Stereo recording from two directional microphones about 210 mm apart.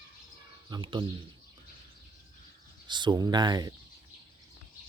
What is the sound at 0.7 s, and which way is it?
Speech, 20° right (ahead or behind).